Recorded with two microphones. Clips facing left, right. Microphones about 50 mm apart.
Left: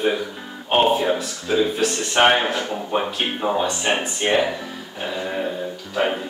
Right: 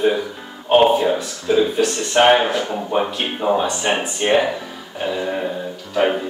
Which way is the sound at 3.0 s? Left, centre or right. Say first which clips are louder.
Right 2 dB; centre.